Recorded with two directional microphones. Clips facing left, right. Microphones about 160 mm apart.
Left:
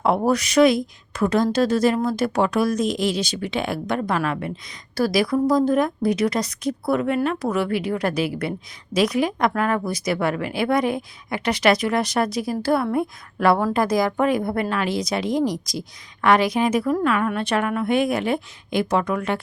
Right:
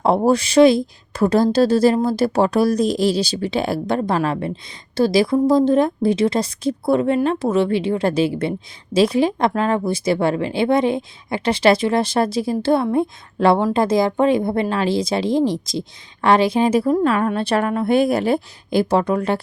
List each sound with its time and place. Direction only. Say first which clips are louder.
0.0 s a woman's voice: right 4 dB; 30° right (ahead or behind)